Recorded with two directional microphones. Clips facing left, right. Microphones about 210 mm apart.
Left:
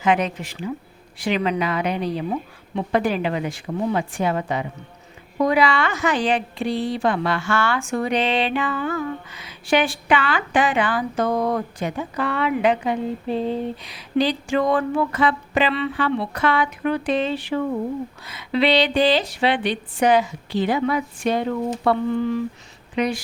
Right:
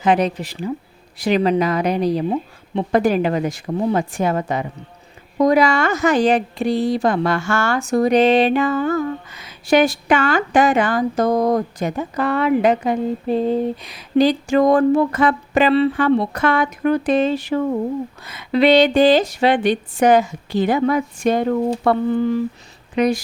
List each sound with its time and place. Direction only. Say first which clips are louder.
0.0 s speech: right 3 dB; 35° right (ahead or behind)